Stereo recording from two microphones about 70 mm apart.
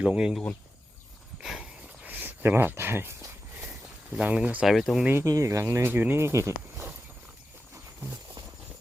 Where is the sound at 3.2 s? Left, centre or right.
Right.